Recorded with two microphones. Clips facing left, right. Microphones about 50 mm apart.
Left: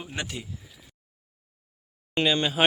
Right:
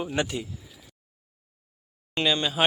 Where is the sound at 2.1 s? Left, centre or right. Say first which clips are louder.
Left 1 dB; left.